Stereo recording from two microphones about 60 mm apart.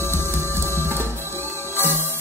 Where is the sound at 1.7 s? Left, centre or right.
Left.